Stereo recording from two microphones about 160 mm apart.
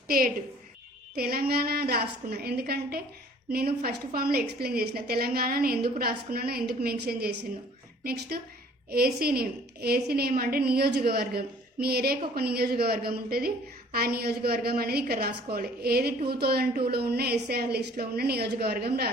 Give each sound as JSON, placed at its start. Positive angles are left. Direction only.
{"t": 1.1, "sound": "a woman's voice", "side_deg": -70}